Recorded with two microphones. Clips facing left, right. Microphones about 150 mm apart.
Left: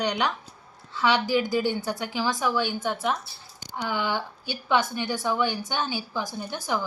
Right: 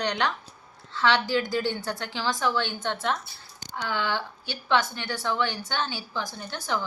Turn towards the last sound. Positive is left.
turn(degrees=10)  # may be behind; listen again after turning